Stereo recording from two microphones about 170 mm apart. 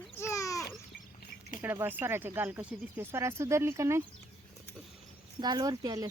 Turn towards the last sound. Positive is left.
turn(degrees=-20)  # may be behind; listen again after turning